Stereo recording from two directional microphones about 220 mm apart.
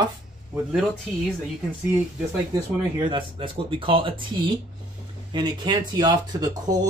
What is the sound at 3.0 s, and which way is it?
Speech, 20° right (ahead or behind).